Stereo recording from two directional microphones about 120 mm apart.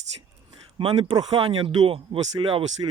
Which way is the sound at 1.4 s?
45° right (ahead or behind).